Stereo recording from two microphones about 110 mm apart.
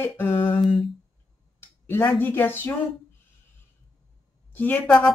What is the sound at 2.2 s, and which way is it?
Speech, 20° left (ahead or behind).